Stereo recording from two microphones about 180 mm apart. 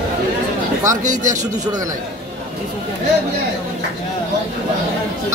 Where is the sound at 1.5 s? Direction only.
20° right (ahead or behind).